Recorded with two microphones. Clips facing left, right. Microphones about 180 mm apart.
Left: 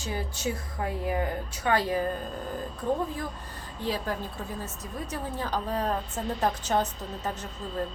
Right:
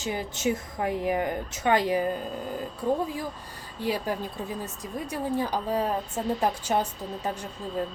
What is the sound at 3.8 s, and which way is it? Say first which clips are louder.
A woman's voice: right 2 dB; 10° right (ahead or behind).